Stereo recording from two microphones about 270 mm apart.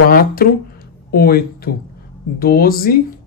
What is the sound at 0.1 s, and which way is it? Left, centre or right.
Speech, left.